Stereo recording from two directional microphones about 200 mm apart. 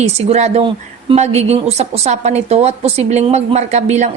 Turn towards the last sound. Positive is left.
turn(degrees=-35)  # may be behind; listen again after turning